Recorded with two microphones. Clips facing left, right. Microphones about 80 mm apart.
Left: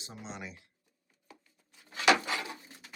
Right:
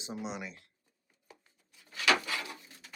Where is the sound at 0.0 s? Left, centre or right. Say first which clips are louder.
Right 5 dB; centre.